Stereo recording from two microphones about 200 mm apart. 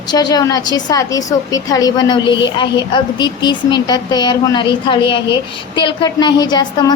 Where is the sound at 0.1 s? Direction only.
20° left (ahead or behind).